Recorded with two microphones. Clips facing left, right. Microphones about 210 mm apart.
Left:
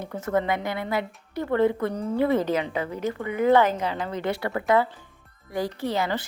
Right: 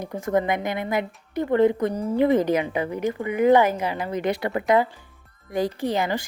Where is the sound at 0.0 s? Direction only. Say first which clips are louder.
Right 2 dB; 15° right (ahead or behind).